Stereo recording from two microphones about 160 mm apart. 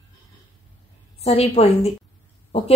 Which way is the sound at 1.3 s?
40° left (ahead or behind).